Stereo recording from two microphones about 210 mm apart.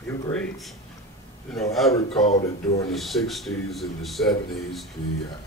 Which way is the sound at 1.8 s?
Centre (ahead or behind).